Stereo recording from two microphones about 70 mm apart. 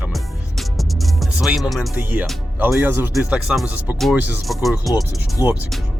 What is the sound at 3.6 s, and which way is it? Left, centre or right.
Speech, right.